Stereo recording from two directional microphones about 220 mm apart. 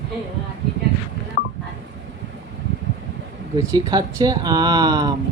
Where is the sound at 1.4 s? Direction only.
30° right (ahead or behind).